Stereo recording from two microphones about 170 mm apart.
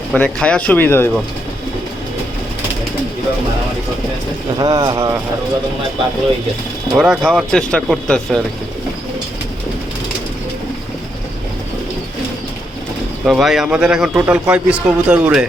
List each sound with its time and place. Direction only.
0.1 s speech: 5° left (ahead or behind)
4.5 s speech: 20° right (ahead or behind)
6.9 s a man's voice: 5° right (ahead or behind)
13.2 s a man's voice: centre (ahead or behind)